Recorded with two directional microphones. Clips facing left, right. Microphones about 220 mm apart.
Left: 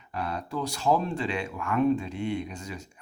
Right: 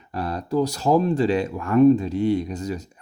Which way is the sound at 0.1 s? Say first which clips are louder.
Right 7 dB; 35° right (ahead or behind).